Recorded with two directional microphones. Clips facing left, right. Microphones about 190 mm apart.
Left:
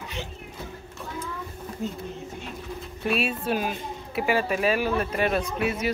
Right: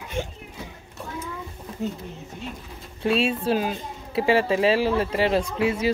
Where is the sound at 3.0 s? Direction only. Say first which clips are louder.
Right 4 dB; 25° right (ahead or behind).